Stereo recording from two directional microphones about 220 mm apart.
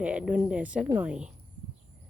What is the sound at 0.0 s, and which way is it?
Speech, 5° right (ahead or behind).